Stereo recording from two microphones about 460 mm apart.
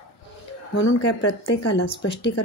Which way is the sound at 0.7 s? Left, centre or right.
Left.